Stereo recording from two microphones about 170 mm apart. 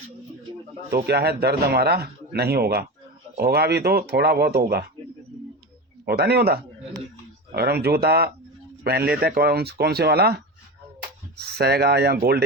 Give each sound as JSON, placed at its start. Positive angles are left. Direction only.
{"t": 0.9, "sound": "speech", "side_deg": -70}
{"t": 6.1, "sound": "speech", "side_deg": -65}